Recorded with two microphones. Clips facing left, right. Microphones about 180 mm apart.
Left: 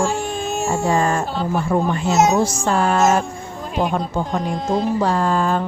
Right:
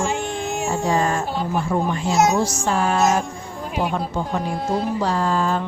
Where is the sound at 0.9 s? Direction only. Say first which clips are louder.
Left 2 dB; 50° left (ahead or behind).